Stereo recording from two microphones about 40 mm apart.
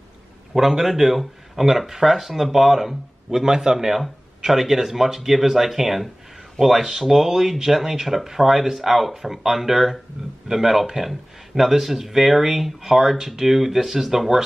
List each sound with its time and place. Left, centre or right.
0.6 s speech: centre